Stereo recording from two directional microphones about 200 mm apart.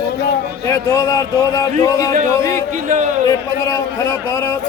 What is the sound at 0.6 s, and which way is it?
A man's voice, 15° left (ahead or behind).